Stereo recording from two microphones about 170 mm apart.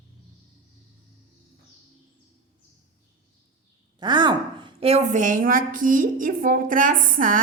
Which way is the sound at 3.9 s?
25° right (ahead or behind).